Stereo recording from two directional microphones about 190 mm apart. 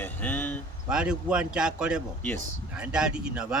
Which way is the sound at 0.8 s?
5° right (ahead or behind).